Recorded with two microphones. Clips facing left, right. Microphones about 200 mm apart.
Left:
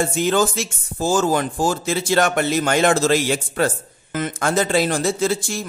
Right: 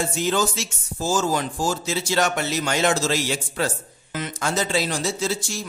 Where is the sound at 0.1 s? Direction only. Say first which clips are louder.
Left 4 dB; 55° left (ahead or behind).